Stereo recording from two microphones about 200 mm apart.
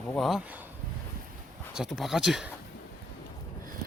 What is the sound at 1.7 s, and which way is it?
Speech, centre (ahead or behind).